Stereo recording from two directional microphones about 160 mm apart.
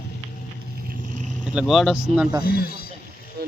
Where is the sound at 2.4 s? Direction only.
70° left (ahead or behind).